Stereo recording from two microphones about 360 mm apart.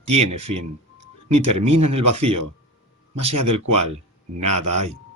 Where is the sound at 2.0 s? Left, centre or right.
Centre.